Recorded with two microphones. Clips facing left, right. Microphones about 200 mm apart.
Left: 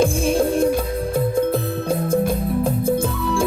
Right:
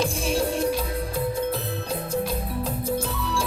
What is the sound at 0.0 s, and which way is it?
Music, 50° left (ahead or behind).